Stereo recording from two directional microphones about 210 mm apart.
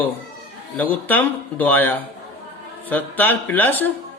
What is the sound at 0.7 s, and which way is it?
A man's voice, 10° left (ahead or behind).